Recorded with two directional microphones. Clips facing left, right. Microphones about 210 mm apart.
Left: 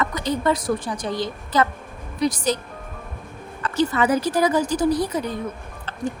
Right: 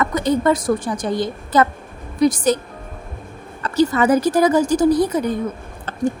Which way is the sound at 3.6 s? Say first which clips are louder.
Right 4 dB; 40° right (ahead or behind).